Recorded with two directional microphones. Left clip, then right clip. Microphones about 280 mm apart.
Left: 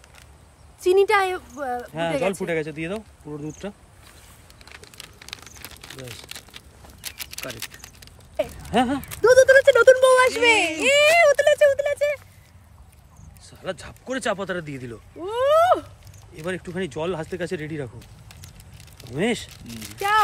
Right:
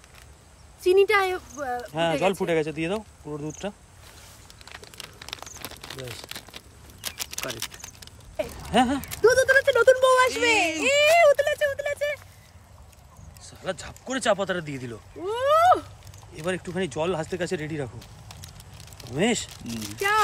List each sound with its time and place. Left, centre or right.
0.8 s speech: centre
4.6 s crumpling: centre
9.7 s a sound: left
10.8 s speech: left; by 12.2 s centre
13.4 s a man's voice: centre